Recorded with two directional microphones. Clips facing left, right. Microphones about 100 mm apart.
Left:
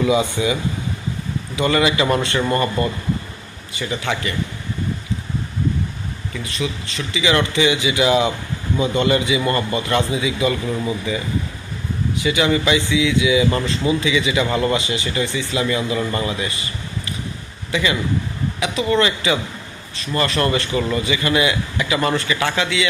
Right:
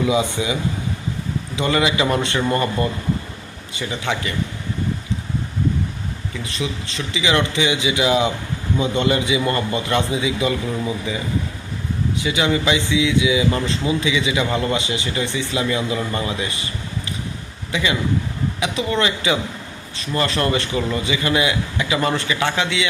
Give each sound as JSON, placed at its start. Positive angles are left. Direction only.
{"t": 0.1, "sound": "a man's voice", "side_deg": -20}
{"t": 1.5, "sound": "a man's voice", "side_deg": -20}
{"t": 7.1, "sound": "a man's voice", "side_deg": -20}
{"t": 12.2, "sound": "a man's voice", "side_deg": -20}
{"t": 17.7, "sound": "a man's voice", "side_deg": -20}